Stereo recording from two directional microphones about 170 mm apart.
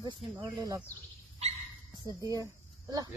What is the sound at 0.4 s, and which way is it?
Speech, 10° right (ahead or behind).